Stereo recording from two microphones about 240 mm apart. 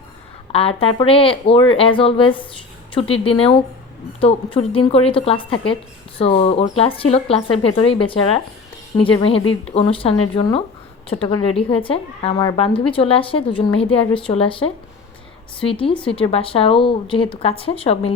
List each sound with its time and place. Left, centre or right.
0.5 s a woman's voice: left